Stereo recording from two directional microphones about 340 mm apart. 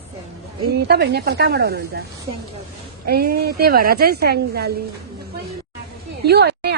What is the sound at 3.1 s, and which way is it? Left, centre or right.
Speech, right.